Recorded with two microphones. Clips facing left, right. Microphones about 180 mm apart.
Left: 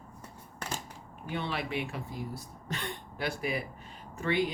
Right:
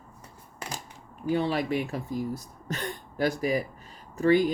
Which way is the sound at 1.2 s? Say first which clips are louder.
Right 9 dB; 35° right (ahead or behind).